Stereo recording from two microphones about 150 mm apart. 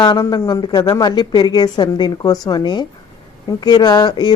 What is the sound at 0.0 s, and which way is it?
A woman's voice, 30° left (ahead or behind).